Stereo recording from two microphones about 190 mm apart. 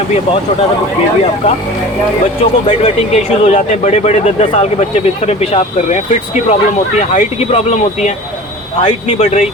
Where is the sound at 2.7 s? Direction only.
35° left (ahead or behind).